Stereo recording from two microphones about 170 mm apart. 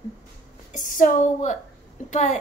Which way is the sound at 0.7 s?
50° left (ahead or behind).